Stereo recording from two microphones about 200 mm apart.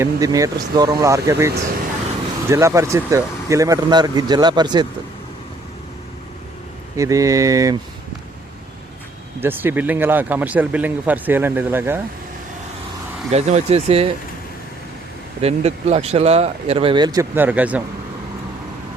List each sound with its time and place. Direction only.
0.0 s speech: 15° right (ahead or behind)
6.9 s speech: 15° right (ahead or behind)
9.4 s speech: 10° right (ahead or behind)
13.3 s speech: 30° right (ahead or behind)
15.4 s speech: 30° right (ahead or behind); by 17.8 s 5° right (ahead or behind)